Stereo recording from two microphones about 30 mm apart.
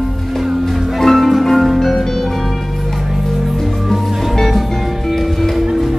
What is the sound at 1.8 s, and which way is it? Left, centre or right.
Music, centre.